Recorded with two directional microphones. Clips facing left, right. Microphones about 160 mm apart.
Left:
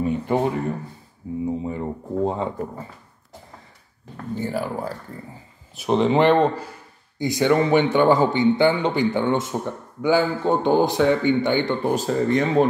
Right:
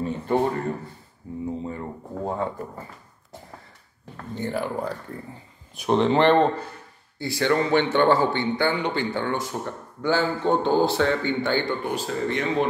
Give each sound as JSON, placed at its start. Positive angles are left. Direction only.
{"t": 0.0, "sound": "speech", "side_deg": 15}
{"t": 4.4, "sound": "speech", "side_deg": 5}
{"t": 11.8, "sound": "speech", "side_deg": 40}